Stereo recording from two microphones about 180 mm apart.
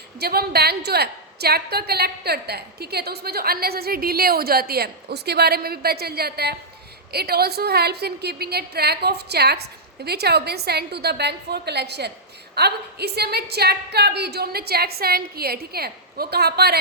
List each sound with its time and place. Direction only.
0.2 s a woman's voice: 60° right (ahead or behind)